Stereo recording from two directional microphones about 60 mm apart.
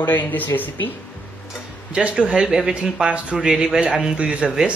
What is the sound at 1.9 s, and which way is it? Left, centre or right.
A man's voice, centre.